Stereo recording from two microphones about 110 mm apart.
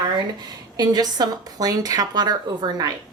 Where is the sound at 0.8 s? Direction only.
40° right (ahead or behind).